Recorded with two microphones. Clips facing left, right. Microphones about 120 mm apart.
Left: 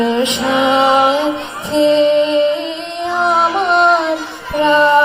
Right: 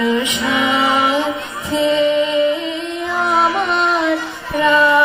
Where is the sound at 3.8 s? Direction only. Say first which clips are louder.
Left 4 dB; 25° left (ahead or behind).